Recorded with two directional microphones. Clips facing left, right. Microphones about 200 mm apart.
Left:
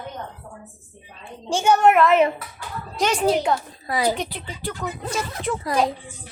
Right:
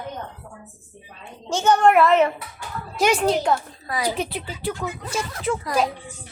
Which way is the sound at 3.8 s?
25° left (ahead or behind).